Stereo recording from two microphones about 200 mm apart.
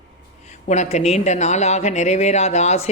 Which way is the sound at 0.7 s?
35° left (ahead or behind).